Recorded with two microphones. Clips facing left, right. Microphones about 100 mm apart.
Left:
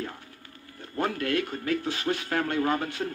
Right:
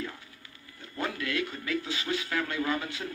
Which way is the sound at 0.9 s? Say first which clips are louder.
Left 5 dB; 45° left (ahead or behind).